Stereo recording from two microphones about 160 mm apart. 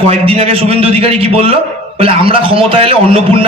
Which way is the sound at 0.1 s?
40° right (ahead or behind).